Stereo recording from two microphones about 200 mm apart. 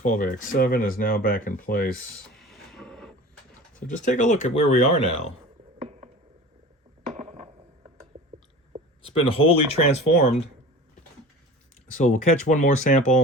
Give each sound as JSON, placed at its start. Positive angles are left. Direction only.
{"t": 0.0, "sound": "speech", "side_deg": 40}
{"t": 2.4, "sound": "train", "side_deg": 0}
{"t": 3.8, "sound": "speech", "side_deg": 40}
{"t": 5.8, "sound": "a sound", "side_deg": -30}
{"t": 7.2, "sound": "a sound", "side_deg": -30}
{"t": 9.0, "sound": "speech", "side_deg": 30}
{"t": 11.9, "sound": "speech", "side_deg": 40}